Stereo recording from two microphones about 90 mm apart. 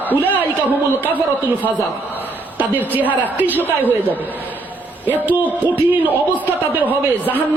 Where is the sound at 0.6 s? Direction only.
20° right (ahead or behind).